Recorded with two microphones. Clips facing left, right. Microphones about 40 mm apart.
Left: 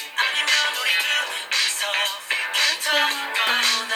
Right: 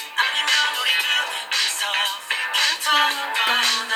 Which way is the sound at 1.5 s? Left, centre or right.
Centre.